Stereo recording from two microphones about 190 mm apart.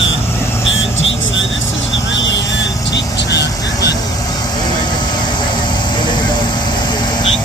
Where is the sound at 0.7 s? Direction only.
85° left.